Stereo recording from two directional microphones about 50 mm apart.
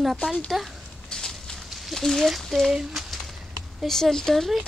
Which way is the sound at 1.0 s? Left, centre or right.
Centre.